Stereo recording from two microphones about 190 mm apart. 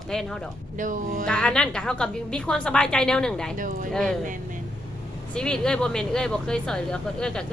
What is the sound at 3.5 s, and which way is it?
Speech, 45° right (ahead or behind).